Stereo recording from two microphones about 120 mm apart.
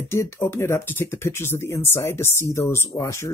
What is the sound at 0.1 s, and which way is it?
Speech, 20° left (ahead or behind).